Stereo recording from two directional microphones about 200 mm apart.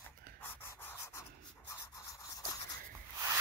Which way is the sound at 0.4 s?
10° left (ahead or behind).